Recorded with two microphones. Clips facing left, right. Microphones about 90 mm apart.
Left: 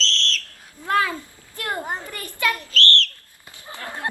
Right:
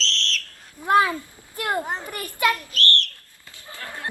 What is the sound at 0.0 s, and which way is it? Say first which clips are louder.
Whistle: left 2 dB; centre (ahead or behind).